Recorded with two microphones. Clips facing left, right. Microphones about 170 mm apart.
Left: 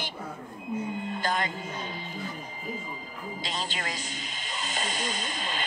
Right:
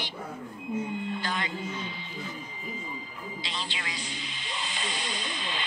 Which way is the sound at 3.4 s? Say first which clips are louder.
Left 4 dB; 45° left (ahead or behind).